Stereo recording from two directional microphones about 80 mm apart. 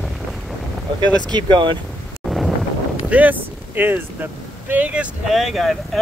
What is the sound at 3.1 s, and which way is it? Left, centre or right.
Speech, right.